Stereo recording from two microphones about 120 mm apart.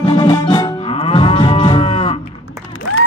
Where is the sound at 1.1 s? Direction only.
45° left (ahead or behind).